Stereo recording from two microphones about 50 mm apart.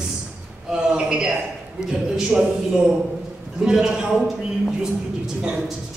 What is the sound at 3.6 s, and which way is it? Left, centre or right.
A man's voice, centre.